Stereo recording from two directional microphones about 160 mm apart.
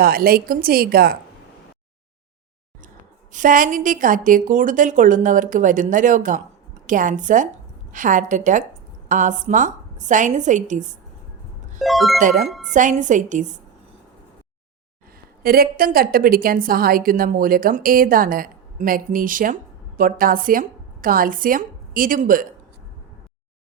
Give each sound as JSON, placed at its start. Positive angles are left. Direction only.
{"t": 0.0, "sound": "a woman's voice", "side_deg": -70}
{"t": 3.3, "sound": "a woman's voice", "side_deg": -55}
{"t": 11.8, "sound": "speech", "side_deg": 0}
{"t": 12.7, "sound": "a woman's voice", "side_deg": -50}
{"t": 15.4, "sound": "a woman's voice", "side_deg": -70}